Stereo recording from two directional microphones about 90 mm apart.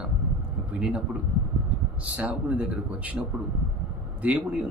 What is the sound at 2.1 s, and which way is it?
Speech, 15° right (ahead or behind).